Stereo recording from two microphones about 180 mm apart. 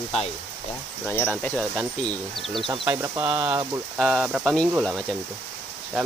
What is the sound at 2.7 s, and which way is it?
Speech, 15° right (ahead or behind).